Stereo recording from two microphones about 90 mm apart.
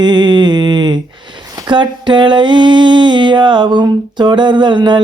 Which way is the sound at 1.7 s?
60° right (ahead or behind).